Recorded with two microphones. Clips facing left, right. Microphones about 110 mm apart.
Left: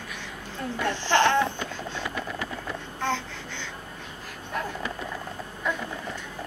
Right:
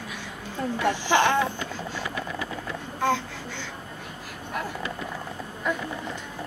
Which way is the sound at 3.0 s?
10° right (ahead or behind).